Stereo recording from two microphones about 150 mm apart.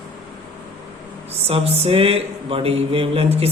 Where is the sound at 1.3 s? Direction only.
45° right (ahead or behind).